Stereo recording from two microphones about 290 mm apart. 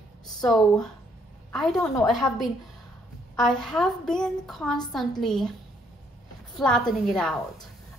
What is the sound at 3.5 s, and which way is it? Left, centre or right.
A woman's voice, centre.